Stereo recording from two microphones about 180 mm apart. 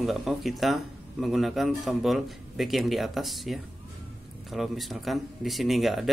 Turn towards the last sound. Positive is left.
turn(degrees=0)  # may be behind; listen again after turning